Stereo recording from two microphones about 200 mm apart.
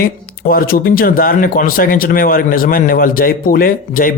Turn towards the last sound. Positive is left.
turn(degrees=45)  # may be behind; listen again after turning